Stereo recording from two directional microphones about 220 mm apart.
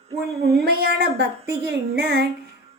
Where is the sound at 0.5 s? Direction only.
45° right (ahead or behind).